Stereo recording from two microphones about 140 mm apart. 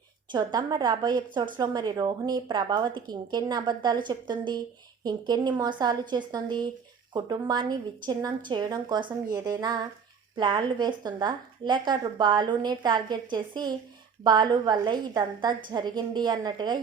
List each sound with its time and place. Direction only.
0.3 s a woman's voice: 30° right (ahead or behind)